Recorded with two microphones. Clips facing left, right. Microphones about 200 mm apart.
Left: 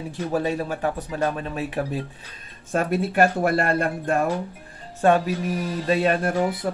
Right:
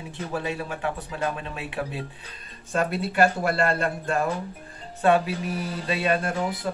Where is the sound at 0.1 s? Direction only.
40° left (ahead or behind).